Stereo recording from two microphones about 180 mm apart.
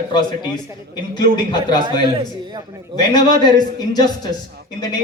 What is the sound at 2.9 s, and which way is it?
A man's voice, 25° left (ahead or behind).